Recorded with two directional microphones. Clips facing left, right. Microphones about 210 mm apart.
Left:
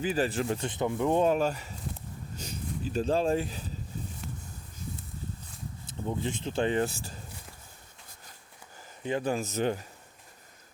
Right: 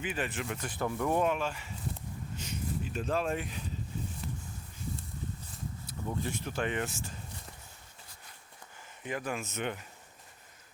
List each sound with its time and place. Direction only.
0.0 s speech: 35° left (ahead or behind)
0.7 s rub: 20° left (ahead or behind)
1.3 s speech: 40° left (ahead or behind)
4.2 s a sound: centre (ahead or behind)
6.1 s speech: 20° left (ahead or behind)
9.0 s speech: 30° left (ahead or behind)